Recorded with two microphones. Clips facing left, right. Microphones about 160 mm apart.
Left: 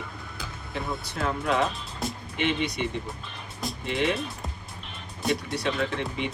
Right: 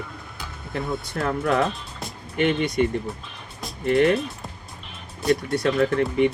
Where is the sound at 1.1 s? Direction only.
55° right (ahead or behind).